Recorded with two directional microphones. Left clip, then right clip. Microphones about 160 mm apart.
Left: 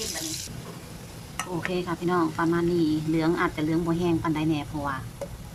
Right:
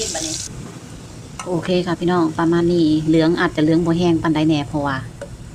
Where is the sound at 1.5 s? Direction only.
25° right (ahead or behind).